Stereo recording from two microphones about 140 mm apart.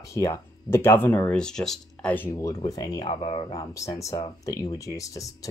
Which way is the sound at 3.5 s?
25° left (ahead or behind).